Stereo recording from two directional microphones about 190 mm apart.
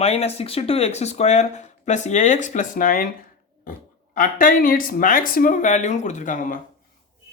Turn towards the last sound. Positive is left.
turn(degrees=45)  # may be behind; listen again after turning